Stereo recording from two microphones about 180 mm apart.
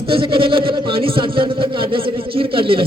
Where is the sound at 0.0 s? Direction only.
30° right (ahead or behind).